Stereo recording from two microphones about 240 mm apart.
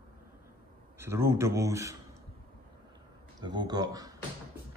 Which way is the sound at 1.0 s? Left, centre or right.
Centre.